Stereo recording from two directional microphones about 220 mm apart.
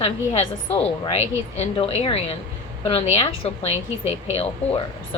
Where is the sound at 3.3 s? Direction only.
25° left (ahead or behind).